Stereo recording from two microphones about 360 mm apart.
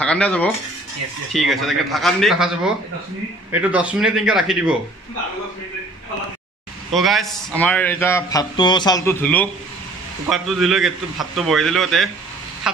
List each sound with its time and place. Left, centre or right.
0.0 s speech: centre
1.5 s speech: centre
6.9 s speech: centre